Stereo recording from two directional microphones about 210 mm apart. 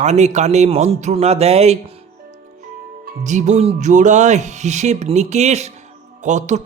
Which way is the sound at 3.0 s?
35° right (ahead or behind).